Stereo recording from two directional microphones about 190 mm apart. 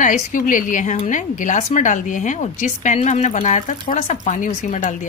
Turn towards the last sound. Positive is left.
turn(degrees=40)  # may be behind; listen again after turning